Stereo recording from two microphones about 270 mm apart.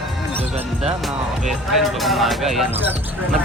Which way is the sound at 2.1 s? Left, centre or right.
Centre.